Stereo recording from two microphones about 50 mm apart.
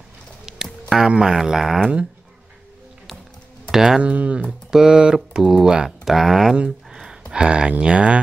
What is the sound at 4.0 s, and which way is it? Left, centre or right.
Speech, right.